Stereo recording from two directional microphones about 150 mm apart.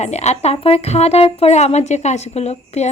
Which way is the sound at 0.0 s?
50° left (ahead or behind).